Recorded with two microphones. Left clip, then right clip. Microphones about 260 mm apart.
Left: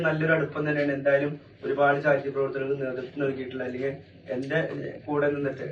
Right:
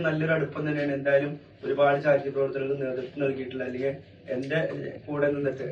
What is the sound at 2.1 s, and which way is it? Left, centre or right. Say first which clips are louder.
A man's voice: right 1 dB; centre.